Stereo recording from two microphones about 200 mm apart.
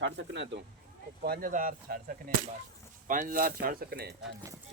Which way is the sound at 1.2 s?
45° right (ahead or behind).